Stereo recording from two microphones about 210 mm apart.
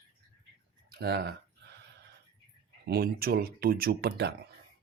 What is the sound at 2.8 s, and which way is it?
Speech, 45° right (ahead or behind).